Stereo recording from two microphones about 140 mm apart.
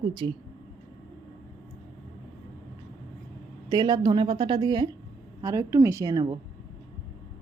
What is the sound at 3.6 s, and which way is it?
A woman's voice, 30° right (ahead or behind).